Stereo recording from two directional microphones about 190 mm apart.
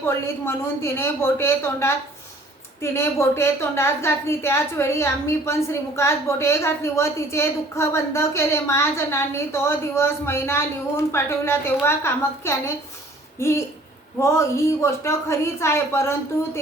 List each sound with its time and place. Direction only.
0.0 s a woman's voice: 15° left (ahead or behind)